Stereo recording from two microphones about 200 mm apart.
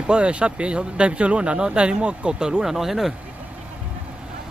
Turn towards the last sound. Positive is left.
turn(degrees=0)  # may be behind; listen again after turning